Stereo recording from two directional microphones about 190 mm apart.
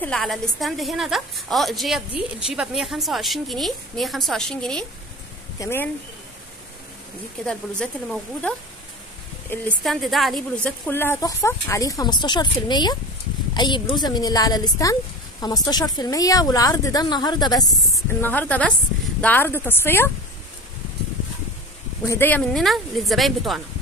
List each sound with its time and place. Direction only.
0.0 s a woman's voice: centre (ahead or behind)
7.4 s a woman's voice: 5° left (ahead or behind); by 17.6 s 20° left (ahead or behind)
18.2 s speech: 10° left (ahead or behind)
22.0 s a woman's voice: 15° left (ahead or behind)